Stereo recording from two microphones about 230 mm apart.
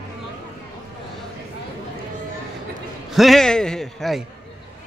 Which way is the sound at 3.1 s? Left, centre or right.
Centre.